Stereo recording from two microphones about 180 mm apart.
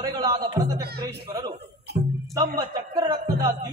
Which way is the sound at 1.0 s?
20° right (ahead or behind).